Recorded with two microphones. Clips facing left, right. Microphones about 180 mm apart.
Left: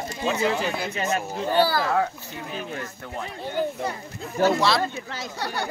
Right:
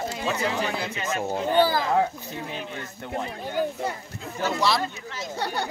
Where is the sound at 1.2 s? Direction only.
25° right (ahead or behind).